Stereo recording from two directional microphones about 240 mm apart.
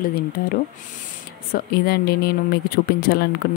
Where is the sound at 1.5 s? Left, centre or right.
Left.